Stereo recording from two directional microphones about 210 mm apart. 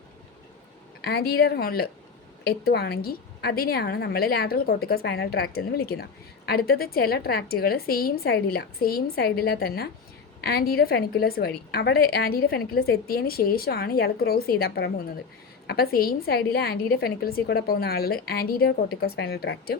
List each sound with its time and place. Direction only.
1.0 s a woman's voice: 50° left (ahead or behind)